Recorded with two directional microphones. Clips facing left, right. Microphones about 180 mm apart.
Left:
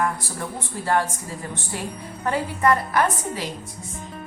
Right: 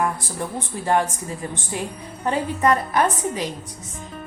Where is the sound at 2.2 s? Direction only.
20° right (ahead or behind).